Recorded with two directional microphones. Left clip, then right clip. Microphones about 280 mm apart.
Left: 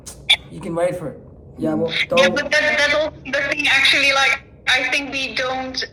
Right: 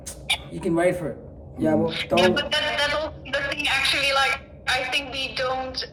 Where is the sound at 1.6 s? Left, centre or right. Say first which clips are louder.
Left 3 dB; left.